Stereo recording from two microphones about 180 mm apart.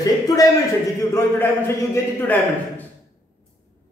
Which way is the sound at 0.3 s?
20° left (ahead or behind).